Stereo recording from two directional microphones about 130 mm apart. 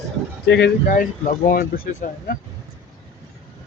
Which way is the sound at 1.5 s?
90° left.